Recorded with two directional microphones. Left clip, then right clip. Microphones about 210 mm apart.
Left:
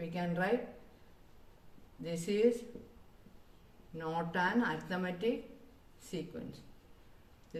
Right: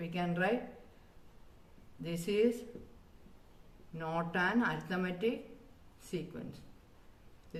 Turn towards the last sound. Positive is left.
turn(degrees=-20)  # may be behind; listen again after turning